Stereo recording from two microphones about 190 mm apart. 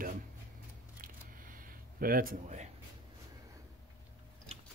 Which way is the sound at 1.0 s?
45° right (ahead or behind).